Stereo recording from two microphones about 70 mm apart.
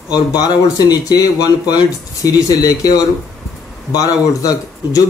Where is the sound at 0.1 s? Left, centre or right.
Left.